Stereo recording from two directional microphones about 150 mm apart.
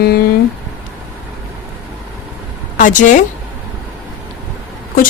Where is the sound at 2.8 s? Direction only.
60° left (ahead or behind).